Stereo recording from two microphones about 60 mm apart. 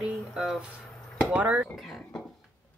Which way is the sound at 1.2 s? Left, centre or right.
Right.